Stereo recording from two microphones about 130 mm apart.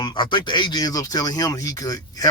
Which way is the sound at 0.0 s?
35° left (ahead or behind).